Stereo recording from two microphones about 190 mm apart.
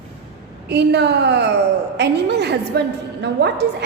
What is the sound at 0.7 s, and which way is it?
A woman's voice, 60° right (ahead or behind).